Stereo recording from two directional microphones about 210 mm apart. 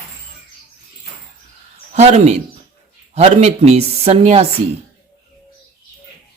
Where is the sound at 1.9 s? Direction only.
30° right (ahead or behind).